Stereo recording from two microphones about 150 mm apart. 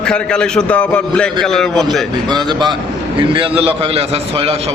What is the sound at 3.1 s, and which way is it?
Speech, 35° right (ahead or behind).